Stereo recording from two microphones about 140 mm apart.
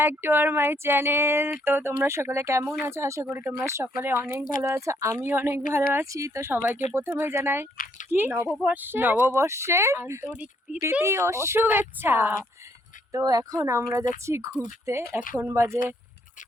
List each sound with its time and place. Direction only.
0.0 s speech: 15° right (ahead or behind)
8.4 s speech: centre (ahead or behind)
8.7 s speech: 15° right (ahead or behind)